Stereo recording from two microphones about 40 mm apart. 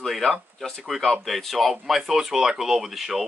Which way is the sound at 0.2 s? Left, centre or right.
Left.